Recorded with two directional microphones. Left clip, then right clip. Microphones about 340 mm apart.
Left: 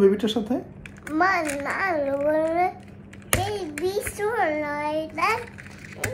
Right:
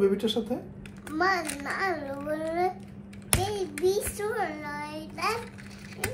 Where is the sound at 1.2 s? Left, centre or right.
Centre.